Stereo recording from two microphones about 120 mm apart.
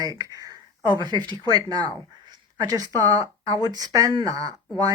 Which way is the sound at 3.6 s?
30° right (ahead or behind).